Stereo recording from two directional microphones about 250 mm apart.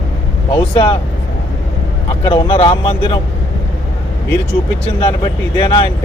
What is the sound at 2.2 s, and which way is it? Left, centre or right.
Speech, centre.